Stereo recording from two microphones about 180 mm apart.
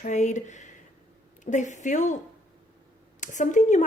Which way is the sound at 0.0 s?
40° left (ahead or behind).